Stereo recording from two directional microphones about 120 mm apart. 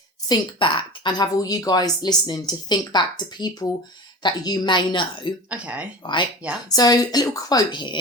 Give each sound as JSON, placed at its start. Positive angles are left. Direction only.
{"t": 0.3, "sound": "a woman's voice", "side_deg": 45}
{"t": 5.5, "sound": "speech", "side_deg": -10}
{"t": 6.7, "sound": "a woman's voice", "side_deg": 35}